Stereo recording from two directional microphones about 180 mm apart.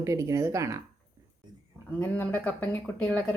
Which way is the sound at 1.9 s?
10° left (ahead or behind).